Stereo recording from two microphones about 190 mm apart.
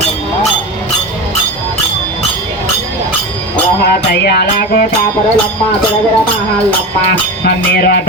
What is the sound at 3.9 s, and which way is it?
Music, 55° left (ahead or behind).